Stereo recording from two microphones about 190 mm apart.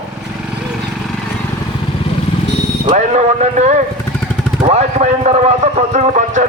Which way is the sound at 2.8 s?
35° right (ahead or behind).